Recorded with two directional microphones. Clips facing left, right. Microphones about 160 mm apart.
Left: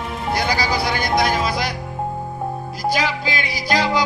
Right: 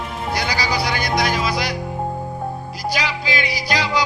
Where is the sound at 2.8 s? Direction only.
50° left (ahead or behind).